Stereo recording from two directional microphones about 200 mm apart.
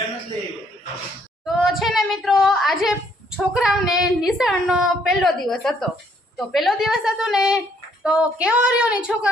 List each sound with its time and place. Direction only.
1.5 s a woman's voice: centre (ahead or behind)